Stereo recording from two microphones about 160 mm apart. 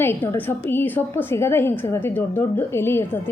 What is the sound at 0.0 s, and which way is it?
A woman's voice, 15° left (ahead or behind).